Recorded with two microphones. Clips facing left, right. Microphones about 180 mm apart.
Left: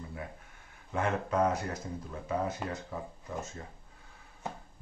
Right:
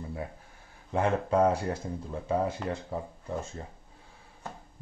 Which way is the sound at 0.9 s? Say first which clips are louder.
Right 4 dB; 30° right (ahead or behind).